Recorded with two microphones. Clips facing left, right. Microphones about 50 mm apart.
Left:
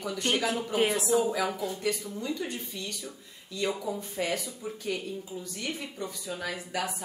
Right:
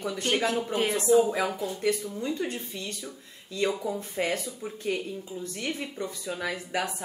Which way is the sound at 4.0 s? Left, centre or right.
Right.